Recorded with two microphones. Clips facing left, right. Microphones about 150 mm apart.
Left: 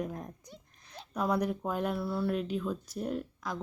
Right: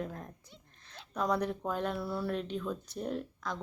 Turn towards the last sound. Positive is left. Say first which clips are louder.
# left 1 dB
turn(degrees=5)  # may be behind; listen again after turning